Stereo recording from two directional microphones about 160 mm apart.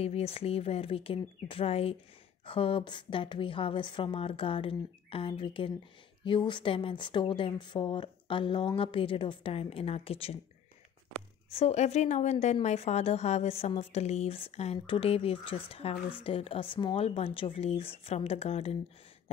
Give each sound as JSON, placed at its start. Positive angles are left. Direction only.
{"t": 0.0, "sound": "speech", "side_deg": 40}
{"t": 11.5, "sound": "a woman's voice", "side_deg": 45}